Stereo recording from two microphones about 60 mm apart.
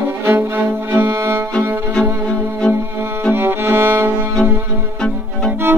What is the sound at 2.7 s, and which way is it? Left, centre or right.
Music, right.